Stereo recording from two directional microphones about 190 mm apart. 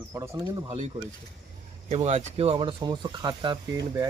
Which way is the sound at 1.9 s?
35° right (ahead or behind).